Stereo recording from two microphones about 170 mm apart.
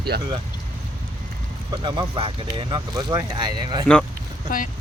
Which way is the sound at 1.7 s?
25° right (ahead or behind).